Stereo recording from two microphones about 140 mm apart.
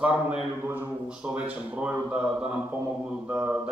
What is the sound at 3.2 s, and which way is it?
Speech, 20° right (ahead or behind).